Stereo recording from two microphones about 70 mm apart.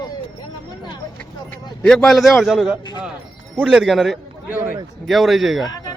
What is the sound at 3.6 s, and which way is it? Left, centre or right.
Speech, centre.